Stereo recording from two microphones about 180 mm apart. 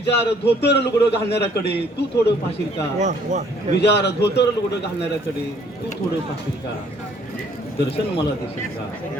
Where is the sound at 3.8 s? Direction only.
70° left (ahead or behind).